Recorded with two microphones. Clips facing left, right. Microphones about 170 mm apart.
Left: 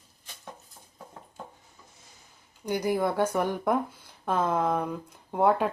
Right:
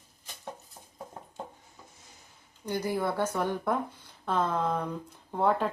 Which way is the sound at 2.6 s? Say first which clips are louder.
Left 3 dB; 15° left (ahead or behind).